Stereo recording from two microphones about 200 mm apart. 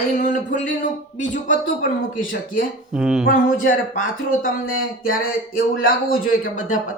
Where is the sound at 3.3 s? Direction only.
45° left (ahead or behind).